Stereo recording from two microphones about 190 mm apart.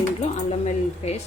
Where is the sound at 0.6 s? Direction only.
35° left (ahead or behind).